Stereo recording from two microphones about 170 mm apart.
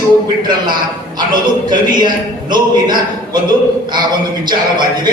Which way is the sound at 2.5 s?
25° right (ahead or behind).